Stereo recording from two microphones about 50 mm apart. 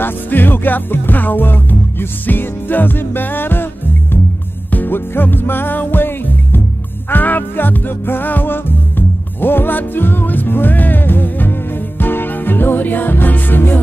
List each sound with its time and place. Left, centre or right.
0.0 s music: left
4.6 s music: left